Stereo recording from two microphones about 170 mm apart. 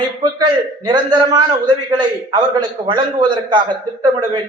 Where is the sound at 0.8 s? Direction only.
25° right (ahead or behind).